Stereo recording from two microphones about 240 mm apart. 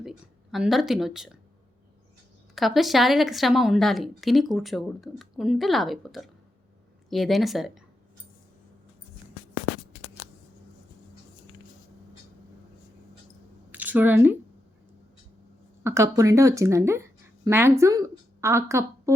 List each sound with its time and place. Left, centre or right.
0.5 s speech: centre
2.6 s speech: centre
13.7 s a sound: centre
15.8 s speech: centre